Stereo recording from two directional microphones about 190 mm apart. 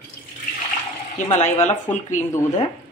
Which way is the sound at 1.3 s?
35° left (ahead or behind).